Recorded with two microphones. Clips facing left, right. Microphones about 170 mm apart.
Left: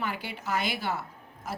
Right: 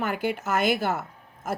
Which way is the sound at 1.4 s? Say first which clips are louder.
Right 6 dB; 50° right (ahead or behind).